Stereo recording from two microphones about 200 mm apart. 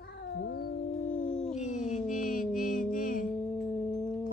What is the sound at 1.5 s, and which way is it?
Music, 40° left (ahead or behind).